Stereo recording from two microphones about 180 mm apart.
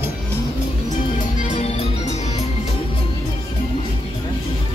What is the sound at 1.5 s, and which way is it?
Music, 35° left (ahead or behind).